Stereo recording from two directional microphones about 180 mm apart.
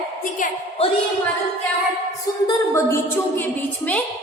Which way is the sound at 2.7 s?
15° left (ahead or behind).